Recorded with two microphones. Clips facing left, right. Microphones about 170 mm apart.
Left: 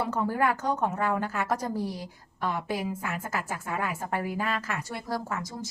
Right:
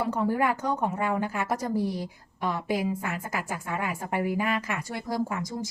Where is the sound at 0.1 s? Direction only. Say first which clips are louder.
Right 1 dB; 15° right (ahead or behind).